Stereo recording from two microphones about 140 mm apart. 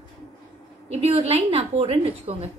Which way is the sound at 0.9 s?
45° right (ahead or behind).